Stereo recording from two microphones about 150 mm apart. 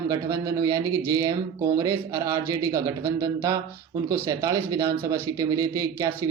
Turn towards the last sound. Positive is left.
turn(degrees=-25)  # may be behind; listen again after turning